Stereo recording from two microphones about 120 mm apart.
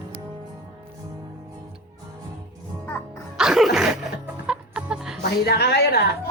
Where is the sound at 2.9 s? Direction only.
15° left (ahead or behind).